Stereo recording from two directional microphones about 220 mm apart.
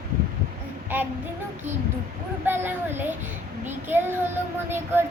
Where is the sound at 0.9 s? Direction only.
10° right (ahead or behind).